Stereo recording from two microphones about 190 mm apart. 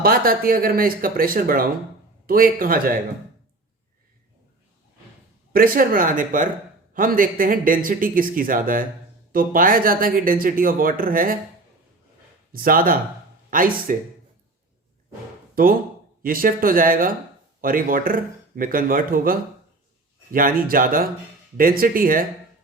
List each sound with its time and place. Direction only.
0.0 s speech: 50° right (ahead or behind)
5.5 s speech: 50° right (ahead or behind)
12.5 s speech: 50° right (ahead or behind)
15.5 s speech: 50° right (ahead or behind)